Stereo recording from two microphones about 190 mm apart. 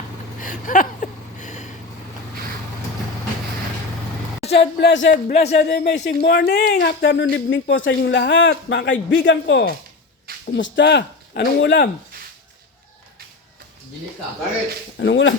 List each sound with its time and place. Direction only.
0.3 s a sound: 45° left (ahead or behind)
4.8 s a man's voice: 70° left (ahead or behind)
5.3 s speech: 35° left (ahead or behind)
5.6 s a man's voice: 60° left (ahead or behind)
14.9 s speech: 75° left (ahead or behind)